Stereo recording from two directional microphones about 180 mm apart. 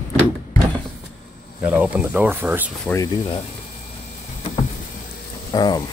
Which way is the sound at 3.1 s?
25° left (ahead or behind).